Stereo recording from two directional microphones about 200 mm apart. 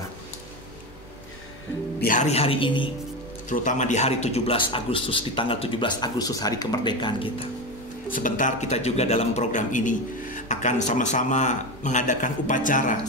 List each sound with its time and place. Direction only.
2.0 s a man's voice: 40° left (ahead or behind); by 2.9 s 25° left (ahead or behind)
3.4 s a man's voice: 40° left (ahead or behind)
8.1 s speech: 40° left (ahead or behind)